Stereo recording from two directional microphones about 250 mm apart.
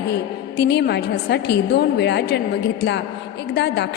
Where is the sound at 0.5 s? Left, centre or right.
Left.